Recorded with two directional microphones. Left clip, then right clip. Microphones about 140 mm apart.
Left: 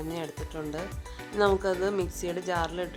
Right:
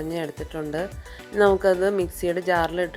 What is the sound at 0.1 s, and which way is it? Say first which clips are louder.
Speech: right 6 dB; 30° right (ahead or behind).